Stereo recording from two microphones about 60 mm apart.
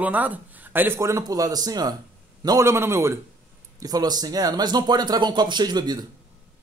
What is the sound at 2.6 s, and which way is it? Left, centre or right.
Speech, right.